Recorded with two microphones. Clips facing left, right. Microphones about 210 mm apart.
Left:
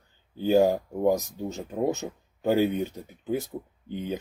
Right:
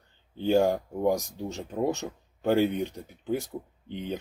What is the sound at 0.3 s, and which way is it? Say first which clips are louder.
Speech: left 2 dB; 5° left (ahead or behind).